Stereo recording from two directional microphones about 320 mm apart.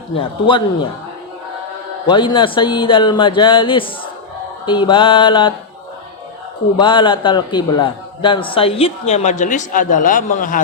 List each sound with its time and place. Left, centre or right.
0.2 s a man's voice: centre
2.0 s a man's voice: centre
6.7 s a man's voice: centre